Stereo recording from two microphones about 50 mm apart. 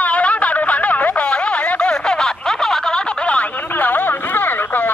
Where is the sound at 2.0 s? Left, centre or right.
Centre.